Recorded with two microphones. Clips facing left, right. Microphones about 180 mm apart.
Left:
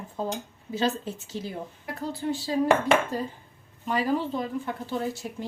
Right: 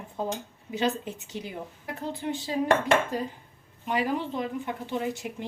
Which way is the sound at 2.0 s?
20° right (ahead or behind).